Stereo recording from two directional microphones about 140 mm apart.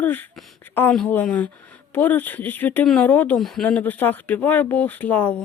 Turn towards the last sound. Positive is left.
turn(degrees=10)  # may be behind; listen again after turning